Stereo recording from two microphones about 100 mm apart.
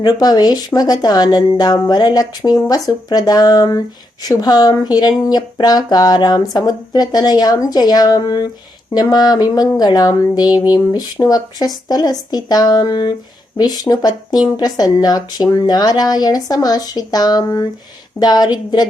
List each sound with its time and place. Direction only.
0.0 s speech: 40° left (ahead or behind)